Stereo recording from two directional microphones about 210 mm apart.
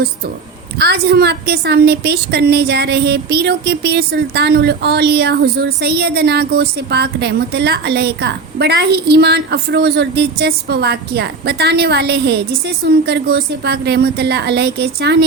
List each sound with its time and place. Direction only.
0.8 s a woman's voice: 50° right (ahead or behind)